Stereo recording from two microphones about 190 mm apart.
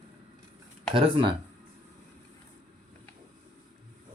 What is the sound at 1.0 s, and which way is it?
Speech, 25° right (ahead or behind).